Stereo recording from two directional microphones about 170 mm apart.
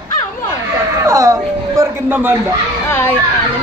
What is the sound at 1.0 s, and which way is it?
Speech, 20° right (ahead or behind).